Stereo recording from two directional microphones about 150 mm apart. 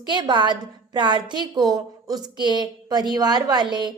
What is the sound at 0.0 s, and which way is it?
A woman's voice, 30° right (ahead or behind).